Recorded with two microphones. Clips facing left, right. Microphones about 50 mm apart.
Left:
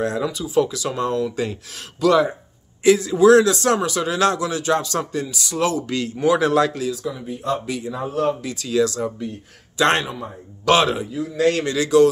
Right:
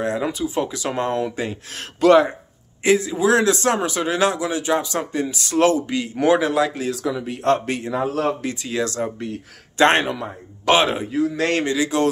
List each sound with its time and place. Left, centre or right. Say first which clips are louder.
0.0 s a man's voice: right 1 dB; right
3.1 s speech: left 6 dB; centre
3.3 s speech: left 2 dB; right
5.2 s speech: right 4 dB; right
5.9 s speech: even; centre
6.4 s speech: left 2 dB; centre
6.9 s speech: right 2 dB; right
8.0 s speech: left 1 dB; right
8.5 s a man's voice: left 3 dB; right
11.1 s a man's voice: left 1 dB; right
11.9 s speech: left 8 dB; right